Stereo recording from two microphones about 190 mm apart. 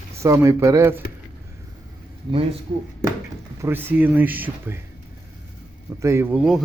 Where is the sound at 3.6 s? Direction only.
10° right (ahead or behind).